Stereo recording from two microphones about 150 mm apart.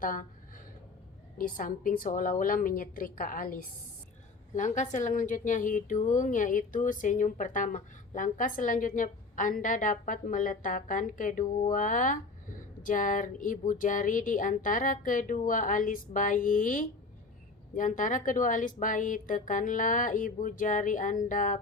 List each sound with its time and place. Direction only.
0.0 s a sound: 65° left (ahead or behind)
1.4 s a woman's voice: 65° left (ahead or behind)
4.5 s a woman's voice: 55° left (ahead or behind)